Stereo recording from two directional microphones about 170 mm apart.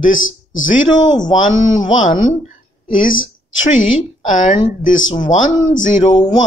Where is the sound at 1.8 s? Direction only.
45° left (ahead or behind).